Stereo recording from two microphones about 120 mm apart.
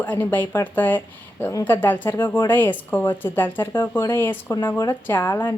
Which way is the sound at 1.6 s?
15° left (ahead or behind).